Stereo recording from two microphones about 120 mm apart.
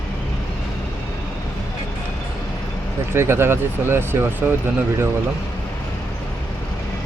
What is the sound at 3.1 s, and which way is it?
Speech, 20° right (ahead or behind).